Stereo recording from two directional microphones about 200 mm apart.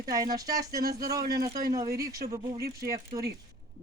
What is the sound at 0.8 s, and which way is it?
Speech, 50° right (ahead or behind).